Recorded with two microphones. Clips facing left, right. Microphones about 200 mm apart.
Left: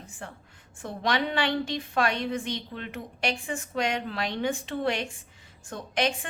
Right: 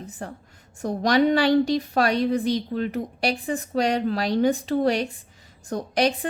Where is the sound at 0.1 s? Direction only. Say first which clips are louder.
Right 7 dB; 40° right (ahead or behind).